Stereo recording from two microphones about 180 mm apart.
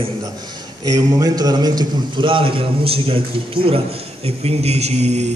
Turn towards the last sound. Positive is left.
turn(degrees=-35)  # may be behind; listen again after turning